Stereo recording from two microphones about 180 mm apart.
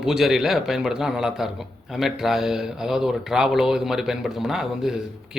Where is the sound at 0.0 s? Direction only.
Centre (ahead or behind).